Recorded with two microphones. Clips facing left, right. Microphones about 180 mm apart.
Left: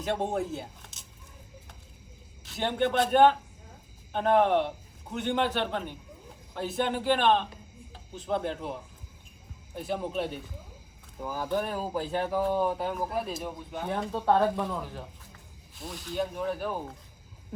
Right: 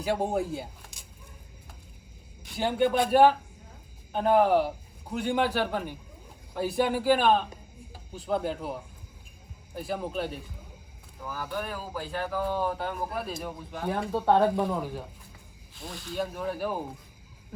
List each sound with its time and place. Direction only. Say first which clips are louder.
0.0 s speech: right 2 dB; 5° right (ahead or behind)
0.4 s a sound: right 1 dB; centre (ahead or behind)
2.6 s speech: right 2 dB; 5° right (ahead or behind)
11.2 s speech: left 3 dB; 25° left (ahead or behind)
12.3 s speech: left 2 dB; 5° left (ahead or behind)